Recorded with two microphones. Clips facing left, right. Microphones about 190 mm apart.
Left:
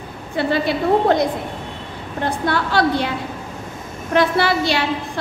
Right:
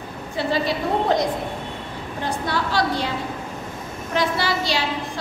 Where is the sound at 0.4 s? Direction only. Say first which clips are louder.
Left 4 dB; 60° left (ahead or behind).